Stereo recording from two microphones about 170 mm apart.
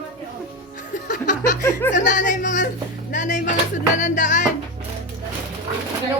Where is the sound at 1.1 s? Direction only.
50° left (ahead or behind).